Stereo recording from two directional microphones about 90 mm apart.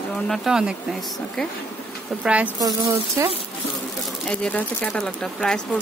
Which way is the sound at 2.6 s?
40° right (ahead or behind).